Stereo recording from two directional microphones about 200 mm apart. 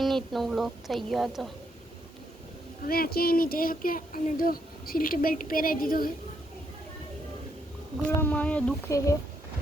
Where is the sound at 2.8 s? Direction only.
50° left (ahead or behind).